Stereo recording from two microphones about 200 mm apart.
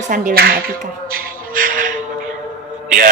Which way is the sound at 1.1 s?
45° right (ahead or behind).